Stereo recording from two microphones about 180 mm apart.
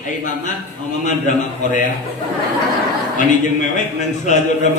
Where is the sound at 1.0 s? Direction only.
45° left (ahead or behind).